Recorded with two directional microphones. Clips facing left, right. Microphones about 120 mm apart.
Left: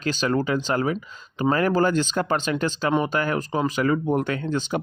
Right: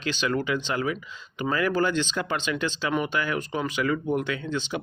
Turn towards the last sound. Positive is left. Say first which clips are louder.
# left 4 dB
turn(degrees=45)  # may be behind; listen again after turning